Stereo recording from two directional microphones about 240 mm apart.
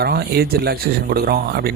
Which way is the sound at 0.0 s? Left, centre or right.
Right.